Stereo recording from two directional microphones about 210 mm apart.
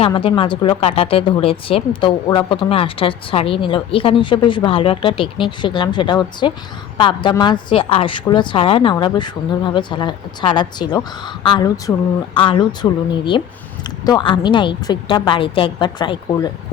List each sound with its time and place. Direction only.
0.0 s speech: 25° left (ahead or behind)